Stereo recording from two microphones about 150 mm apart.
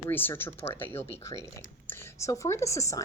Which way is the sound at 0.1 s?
15° left (ahead or behind).